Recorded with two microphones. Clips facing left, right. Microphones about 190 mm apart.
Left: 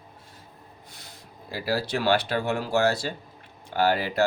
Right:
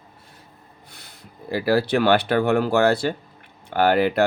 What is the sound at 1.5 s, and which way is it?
Speech, 60° right (ahead or behind).